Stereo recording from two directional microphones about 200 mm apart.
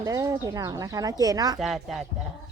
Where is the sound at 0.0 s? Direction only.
15° right (ahead or behind).